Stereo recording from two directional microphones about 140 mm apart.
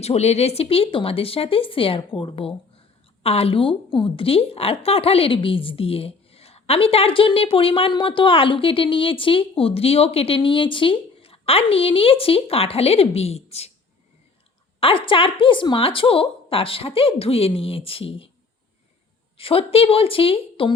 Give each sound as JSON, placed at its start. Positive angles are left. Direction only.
{"t": 0.0, "sound": "a woman's voice", "side_deg": 50}
{"t": 14.8, "sound": "a woman's voice", "side_deg": 40}
{"t": 19.4, "sound": "a woman's voice", "side_deg": 40}